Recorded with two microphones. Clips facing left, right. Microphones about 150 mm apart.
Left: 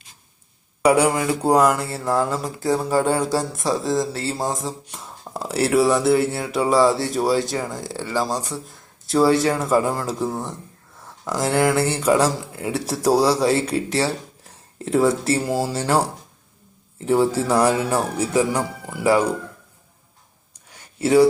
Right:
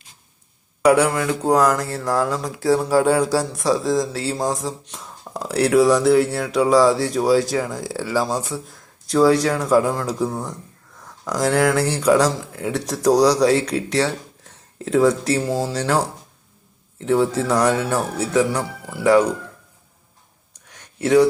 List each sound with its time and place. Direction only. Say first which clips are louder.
0.8 s speech: right 1 dB; 5° left (ahead or behind)
17.1 s speech: even; 10° left (ahead or behind)
20.7 s a sound: right 1 dB; 5° left (ahead or behind)